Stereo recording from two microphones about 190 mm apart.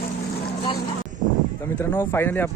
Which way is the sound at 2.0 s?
10° left (ahead or behind).